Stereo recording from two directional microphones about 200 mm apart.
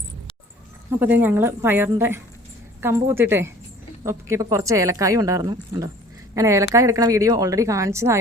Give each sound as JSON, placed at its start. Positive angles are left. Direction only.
{"t": 0.9, "sound": "a woman's voice", "side_deg": -10}